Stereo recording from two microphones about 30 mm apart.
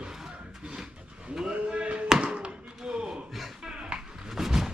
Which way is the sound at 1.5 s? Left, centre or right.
Right.